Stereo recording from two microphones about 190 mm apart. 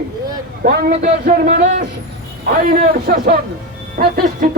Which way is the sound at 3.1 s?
50° right (ahead or behind).